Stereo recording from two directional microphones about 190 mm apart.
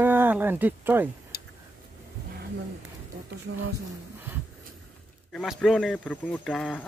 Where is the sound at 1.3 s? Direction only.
55° left (ahead or behind).